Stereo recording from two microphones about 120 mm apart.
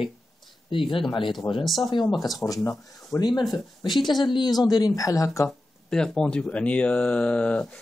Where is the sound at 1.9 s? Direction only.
40° left (ahead or behind).